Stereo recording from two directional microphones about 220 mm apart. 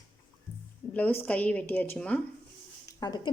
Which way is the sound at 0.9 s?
5° left (ahead or behind).